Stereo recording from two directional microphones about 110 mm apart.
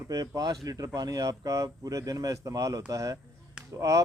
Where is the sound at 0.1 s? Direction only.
35° right (ahead or behind).